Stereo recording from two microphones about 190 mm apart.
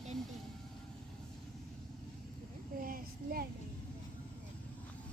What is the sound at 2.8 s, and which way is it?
Child singing, 50° right (ahead or behind).